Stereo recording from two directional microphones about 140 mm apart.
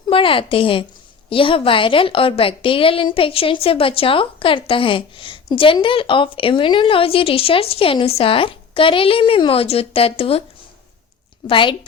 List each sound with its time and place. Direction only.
0.1 s a woman's voice: 40° left (ahead or behind)
11.4 s a woman's voice: 35° left (ahead or behind)